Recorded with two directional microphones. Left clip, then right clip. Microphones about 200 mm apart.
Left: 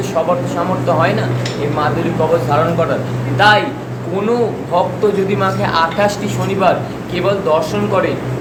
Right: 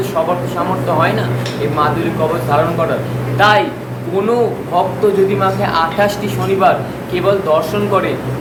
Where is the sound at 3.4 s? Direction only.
10° left (ahead or behind).